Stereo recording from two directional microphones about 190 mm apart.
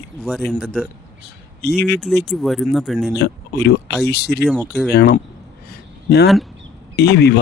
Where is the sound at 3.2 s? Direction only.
60° left (ahead or behind).